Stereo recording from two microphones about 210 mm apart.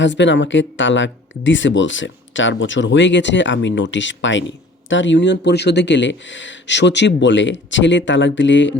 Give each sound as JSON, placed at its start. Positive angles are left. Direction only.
{"t": 0.0, "sound": "speech", "side_deg": 60}